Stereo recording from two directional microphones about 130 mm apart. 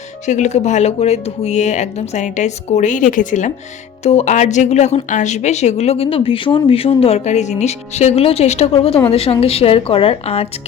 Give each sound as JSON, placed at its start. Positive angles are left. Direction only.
{"t": 0.3, "sound": "speech", "side_deg": 65}
{"t": 4.0, "sound": "speech", "side_deg": 55}